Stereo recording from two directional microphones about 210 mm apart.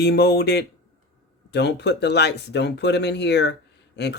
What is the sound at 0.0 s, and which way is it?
Speech, 50° left (ahead or behind).